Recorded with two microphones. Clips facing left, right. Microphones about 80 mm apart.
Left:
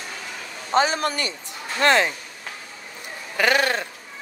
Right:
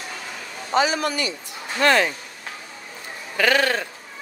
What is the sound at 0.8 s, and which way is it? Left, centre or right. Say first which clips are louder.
Speech: even; left.